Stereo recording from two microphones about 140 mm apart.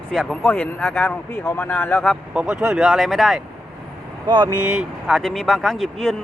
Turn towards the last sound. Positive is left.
turn(degrees=0)  # may be behind; listen again after turning